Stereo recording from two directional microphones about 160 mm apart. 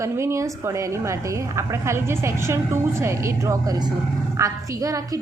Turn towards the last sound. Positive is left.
turn(degrees=-20)  # may be behind; listen again after turning